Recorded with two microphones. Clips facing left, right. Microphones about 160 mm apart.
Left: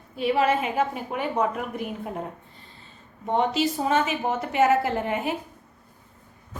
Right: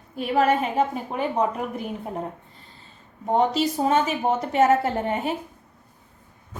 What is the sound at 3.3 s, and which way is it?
A woman's voice, 40° right (ahead or behind).